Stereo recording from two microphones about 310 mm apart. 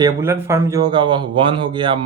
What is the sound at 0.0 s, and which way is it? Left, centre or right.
Speech, centre.